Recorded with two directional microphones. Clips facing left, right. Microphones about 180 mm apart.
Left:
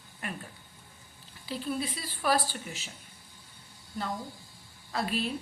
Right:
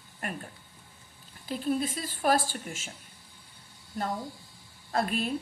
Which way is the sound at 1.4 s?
45° right (ahead or behind).